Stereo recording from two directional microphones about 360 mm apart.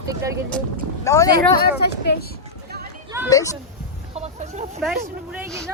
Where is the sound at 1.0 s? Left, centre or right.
Centre.